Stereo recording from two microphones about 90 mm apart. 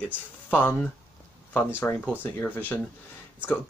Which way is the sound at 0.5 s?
20° left (ahead or behind).